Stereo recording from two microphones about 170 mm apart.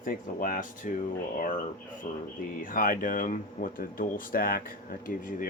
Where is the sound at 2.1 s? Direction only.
50° left (ahead or behind).